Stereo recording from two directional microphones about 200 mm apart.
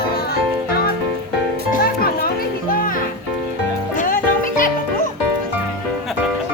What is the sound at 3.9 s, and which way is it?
Music, 40° left (ahead or behind).